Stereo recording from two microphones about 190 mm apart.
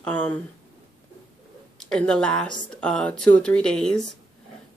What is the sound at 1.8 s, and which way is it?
Speech, 5° left (ahead or behind).